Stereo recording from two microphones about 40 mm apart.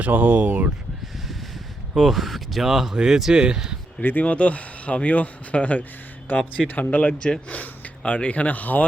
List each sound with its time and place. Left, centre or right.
0.0 s speech: right
2.0 s speech: centre
3.3 s speech: centre
4.0 s speech: left
4.3 s speech: left
6.3 s speech: left
6.7 s speech: left